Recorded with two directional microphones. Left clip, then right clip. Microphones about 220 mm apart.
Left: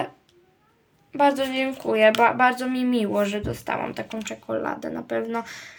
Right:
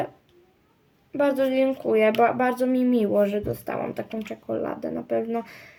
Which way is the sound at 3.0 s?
35° left (ahead or behind).